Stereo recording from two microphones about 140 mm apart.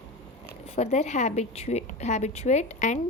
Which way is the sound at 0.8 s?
50° left (ahead or behind).